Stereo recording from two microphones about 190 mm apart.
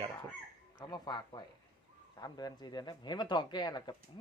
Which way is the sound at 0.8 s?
20° left (ahead or behind).